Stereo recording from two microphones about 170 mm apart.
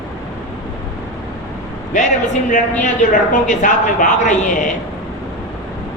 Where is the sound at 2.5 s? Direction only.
50° left (ahead or behind).